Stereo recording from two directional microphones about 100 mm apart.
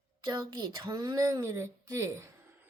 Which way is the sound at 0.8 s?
40° right (ahead or behind).